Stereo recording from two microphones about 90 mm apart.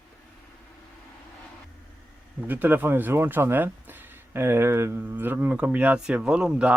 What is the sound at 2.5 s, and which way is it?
Speech, 20° right (ahead or behind).